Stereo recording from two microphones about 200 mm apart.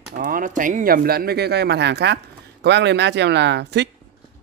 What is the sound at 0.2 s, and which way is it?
Speech, 45° right (ahead or behind).